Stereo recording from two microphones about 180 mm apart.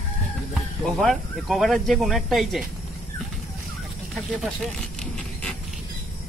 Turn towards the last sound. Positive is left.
turn(degrees=5)  # may be behind; listen again after turning